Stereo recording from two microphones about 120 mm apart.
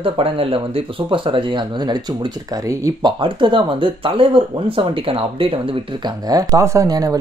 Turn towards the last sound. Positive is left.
turn(degrees=-30)  # may be behind; listen again after turning